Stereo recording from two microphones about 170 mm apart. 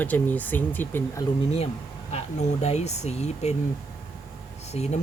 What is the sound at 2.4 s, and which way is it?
Speech, 40° left (ahead or behind).